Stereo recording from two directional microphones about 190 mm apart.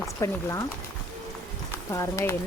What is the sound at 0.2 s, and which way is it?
Speech, 15° left (ahead or behind).